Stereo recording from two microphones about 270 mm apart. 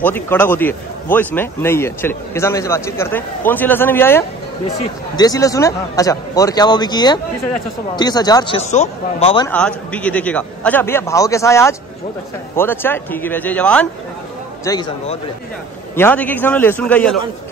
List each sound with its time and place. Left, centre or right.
0.0 s speech: centre
9.5 s speech: centre
14.6 s a man's voice: centre